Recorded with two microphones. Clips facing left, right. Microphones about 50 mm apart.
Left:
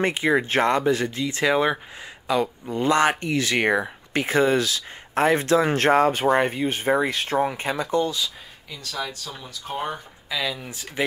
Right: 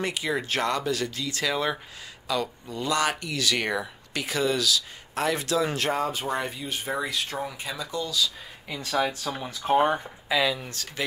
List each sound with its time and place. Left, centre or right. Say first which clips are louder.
0.0 s speech: left 7 dB; left
8.6 s speech: right 3 dB; right
8.9 s speech: right 5 dB; right
10.2 s speech: right 3 dB; centre
10.7 s speech: left 5 dB; centre